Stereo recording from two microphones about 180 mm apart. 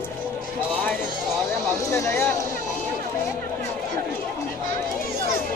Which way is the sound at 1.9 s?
15° left (ahead or behind).